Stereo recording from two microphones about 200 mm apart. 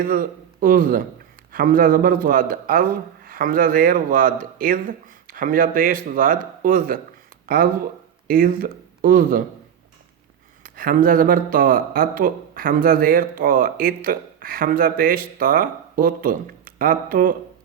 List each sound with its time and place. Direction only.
0.0 s speech: 45° right (ahead or behind)
10.6 s speech: 45° right (ahead or behind)